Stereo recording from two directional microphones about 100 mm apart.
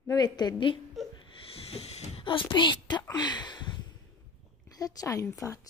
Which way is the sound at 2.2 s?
55° left (ahead or behind).